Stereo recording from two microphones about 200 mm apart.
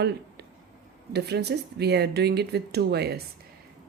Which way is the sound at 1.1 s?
55° right (ahead or behind).